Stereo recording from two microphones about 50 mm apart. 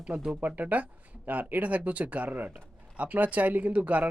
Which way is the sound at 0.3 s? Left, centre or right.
Right.